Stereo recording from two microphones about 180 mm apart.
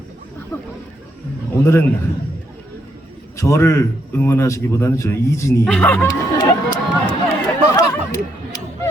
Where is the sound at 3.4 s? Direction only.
15° left (ahead or behind).